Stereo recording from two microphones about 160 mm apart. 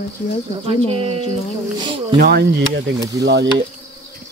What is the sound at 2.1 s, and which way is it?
Speech, 80° right.